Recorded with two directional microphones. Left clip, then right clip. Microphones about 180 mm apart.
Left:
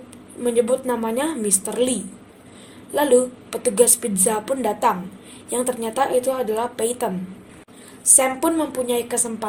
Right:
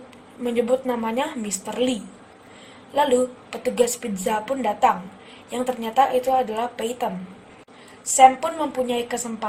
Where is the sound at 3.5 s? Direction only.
40° left (ahead or behind).